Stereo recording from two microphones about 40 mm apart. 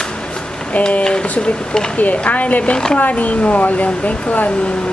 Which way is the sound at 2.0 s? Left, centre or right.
Left.